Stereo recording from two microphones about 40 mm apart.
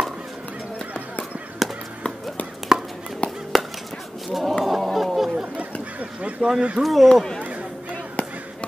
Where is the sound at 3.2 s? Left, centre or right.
Left.